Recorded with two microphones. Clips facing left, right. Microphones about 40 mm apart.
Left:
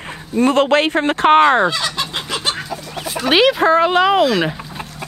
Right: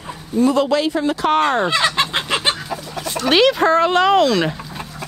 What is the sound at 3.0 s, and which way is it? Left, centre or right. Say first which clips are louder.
Speech: left 1 dB; centre.